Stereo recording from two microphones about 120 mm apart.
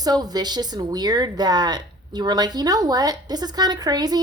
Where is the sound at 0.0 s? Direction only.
35° right (ahead or behind).